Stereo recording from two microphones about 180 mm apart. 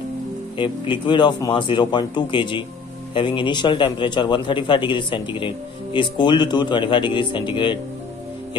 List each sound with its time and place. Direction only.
0.6 s a man's voice: 25° left (ahead or behind)